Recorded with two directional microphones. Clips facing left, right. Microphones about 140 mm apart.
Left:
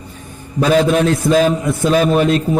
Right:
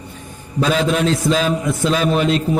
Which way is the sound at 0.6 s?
50° left (ahead or behind).